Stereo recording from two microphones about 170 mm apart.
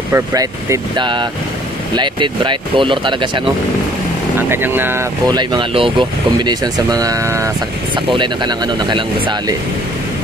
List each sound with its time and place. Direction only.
0.1 s speech: 20° right (ahead or behind)
4.4 s speech: 10° right (ahead or behind)